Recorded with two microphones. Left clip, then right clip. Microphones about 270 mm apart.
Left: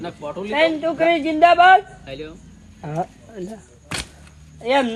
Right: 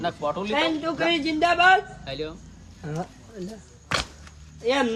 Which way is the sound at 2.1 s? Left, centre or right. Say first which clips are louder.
Right 1 dB; centre.